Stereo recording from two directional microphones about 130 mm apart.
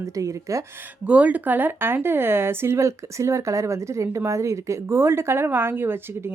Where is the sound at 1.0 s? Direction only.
10° right (ahead or behind).